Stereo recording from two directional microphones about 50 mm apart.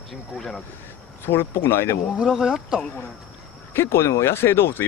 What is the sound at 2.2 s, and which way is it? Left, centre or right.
Speech, centre.